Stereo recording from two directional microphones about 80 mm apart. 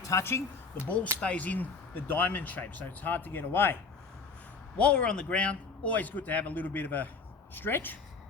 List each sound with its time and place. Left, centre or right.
0.0 s speech: left
1.2 s speech: centre
4.8 s speech: centre